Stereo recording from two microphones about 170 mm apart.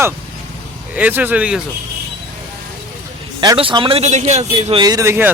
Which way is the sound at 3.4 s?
30° right (ahead or behind).